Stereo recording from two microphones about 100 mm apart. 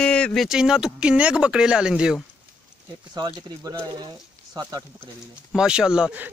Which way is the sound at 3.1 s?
40° right (ahead or behind).